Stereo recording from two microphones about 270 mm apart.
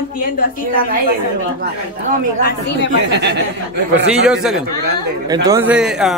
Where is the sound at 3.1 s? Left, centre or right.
Right.